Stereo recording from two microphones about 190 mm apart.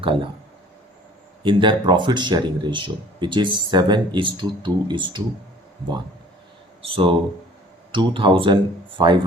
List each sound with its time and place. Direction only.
0.0 s speech: 25° right (ahead or behind)
1.4 s speech: 25° right (ahead or behind)
6.8 s speech: 30° right (ahead or behind)